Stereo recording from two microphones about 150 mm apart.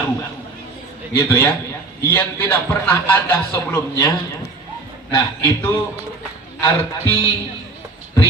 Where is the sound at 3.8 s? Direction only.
25° left (ahead or behind).